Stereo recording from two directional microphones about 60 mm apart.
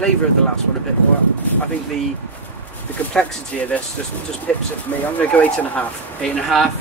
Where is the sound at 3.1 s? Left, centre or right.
Centre.